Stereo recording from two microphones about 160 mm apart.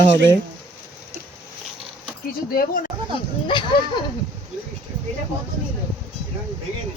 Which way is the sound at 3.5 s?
30° left (ahead or behind).